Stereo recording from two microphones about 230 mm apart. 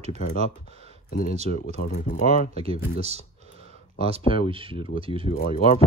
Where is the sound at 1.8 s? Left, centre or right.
Left.